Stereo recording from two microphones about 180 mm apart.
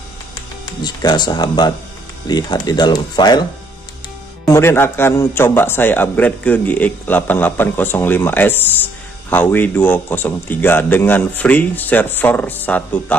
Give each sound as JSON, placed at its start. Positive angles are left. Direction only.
{"t": 0.8, "sound": "speech", "side_deg": 25}
{"t": 4.5, "sound": "a man's voice", "side_deg": 15}